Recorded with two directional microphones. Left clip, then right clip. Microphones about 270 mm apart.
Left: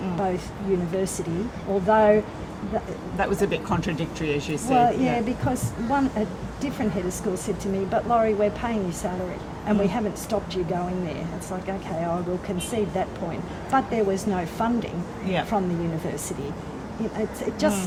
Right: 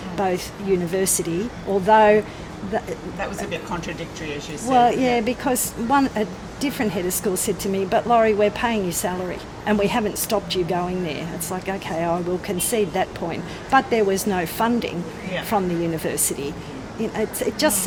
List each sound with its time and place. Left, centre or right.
0.2 s speech: right
17.2 s speech: right